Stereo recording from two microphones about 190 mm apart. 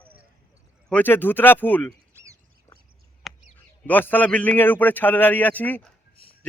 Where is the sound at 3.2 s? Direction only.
Centre (ahead or behind).